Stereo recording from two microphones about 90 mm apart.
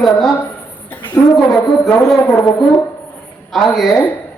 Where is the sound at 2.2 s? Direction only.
25° left (ahead or behind).